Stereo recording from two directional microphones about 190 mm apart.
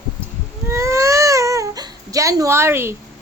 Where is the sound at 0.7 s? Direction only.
15° right (ahead or behind).